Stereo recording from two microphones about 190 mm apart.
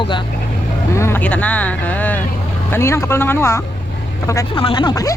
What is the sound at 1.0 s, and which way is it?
Speech, 10° left (ahead or behind).